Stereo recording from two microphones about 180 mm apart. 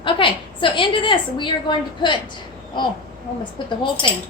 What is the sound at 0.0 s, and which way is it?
A woman's voice, 30° left (ahead or behind).